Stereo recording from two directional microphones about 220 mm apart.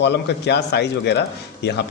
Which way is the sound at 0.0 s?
50° left (ahead or behind).